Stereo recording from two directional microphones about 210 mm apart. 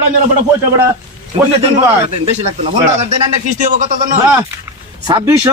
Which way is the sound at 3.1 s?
35° right (ahead or behind).